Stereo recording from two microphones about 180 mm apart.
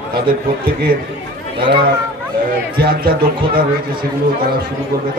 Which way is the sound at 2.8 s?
60° right (ahead or behind).